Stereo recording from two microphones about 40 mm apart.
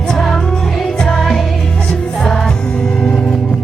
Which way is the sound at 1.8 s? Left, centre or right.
Left.